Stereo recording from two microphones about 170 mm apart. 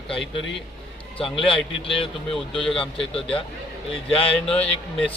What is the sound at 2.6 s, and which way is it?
Speech, 5° left (ahead or behind).